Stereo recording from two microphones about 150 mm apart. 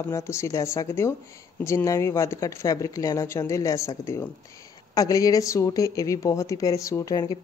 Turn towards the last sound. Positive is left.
turn(degrees=25)  # may be behind; listen again after turning